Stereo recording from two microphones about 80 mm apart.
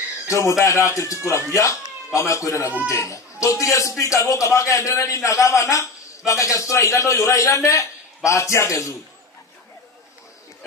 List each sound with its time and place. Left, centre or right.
0.3 s speech: left